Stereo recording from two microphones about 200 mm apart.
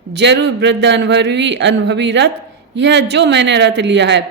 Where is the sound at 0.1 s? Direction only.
60° right (ahead or behind).